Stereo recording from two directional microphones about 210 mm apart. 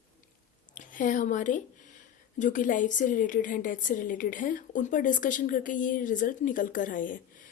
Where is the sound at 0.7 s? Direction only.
40° left (ahead or behind).